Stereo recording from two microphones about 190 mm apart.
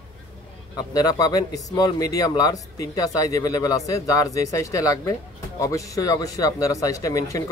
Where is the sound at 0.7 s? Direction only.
20° left (ahead or behind).